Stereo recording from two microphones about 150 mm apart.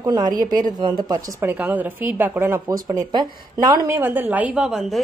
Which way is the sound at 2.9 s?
25° right (ahead or behind).